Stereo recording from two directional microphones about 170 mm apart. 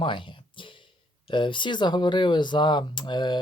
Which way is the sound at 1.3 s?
30° left (ahead or behind).